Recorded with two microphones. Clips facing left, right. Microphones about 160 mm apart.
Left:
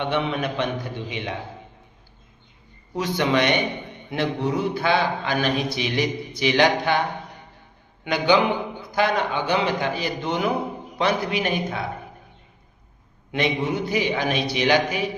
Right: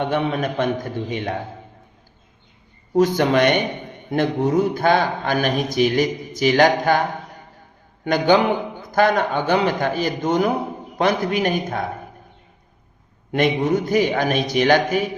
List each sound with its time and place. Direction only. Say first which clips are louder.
0.0 s a man's voice: right 3 dB; 40° right (ahead or behind)
2.9 s a man's voice: right 6 dB; 45° right (ahead or behind)
8.0 s a man's voice: right 3 dB; 45° right (ahead or behind)
13.3 s a man's voice: right 5 dB; 50° right (ahead or behind)